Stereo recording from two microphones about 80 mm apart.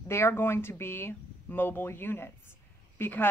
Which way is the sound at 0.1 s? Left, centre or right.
Left.